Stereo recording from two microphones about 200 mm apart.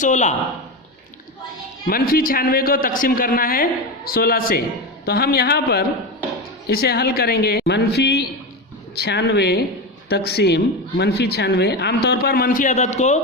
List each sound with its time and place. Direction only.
0.0 s speech: 35° left (ahead or behind)
1.9 s a woman's voice: 45° left (ahead or behind)